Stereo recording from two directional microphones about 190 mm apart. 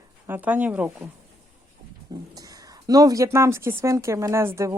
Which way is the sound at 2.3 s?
20° right (ahead or behind).